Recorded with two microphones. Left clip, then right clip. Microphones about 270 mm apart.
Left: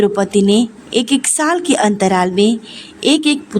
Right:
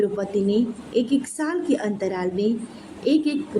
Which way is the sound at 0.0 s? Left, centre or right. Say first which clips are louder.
Left 9 dB; left.